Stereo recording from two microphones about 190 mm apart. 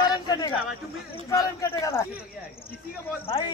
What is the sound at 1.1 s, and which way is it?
Speech, 15° left (ahead or behind).